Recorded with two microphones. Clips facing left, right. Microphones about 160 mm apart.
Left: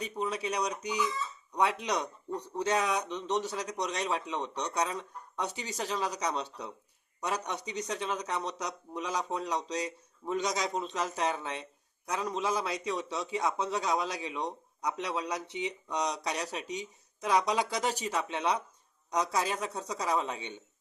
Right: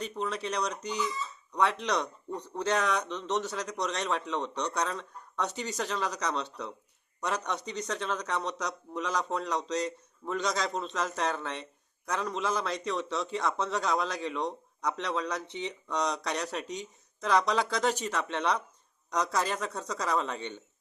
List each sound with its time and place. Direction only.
0.0 s a man's voice: 10° left (ahead or behind)